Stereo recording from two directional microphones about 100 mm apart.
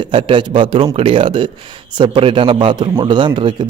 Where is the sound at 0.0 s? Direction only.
55° right (ahead or behind).